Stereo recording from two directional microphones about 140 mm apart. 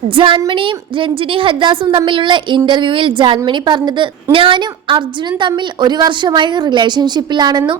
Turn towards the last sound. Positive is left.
turn(degrees=-30)  # may be behind; listen again after turning